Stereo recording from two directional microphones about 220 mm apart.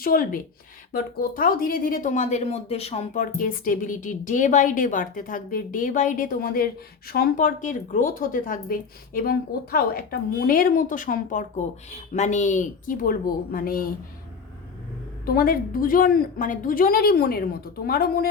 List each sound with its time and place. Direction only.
0.0 s speech: 40° left (ahead or behind)
15.3 s a woman's voice: 40° left (ahead or behind)